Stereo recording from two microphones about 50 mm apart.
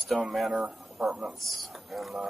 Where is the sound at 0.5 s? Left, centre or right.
Right.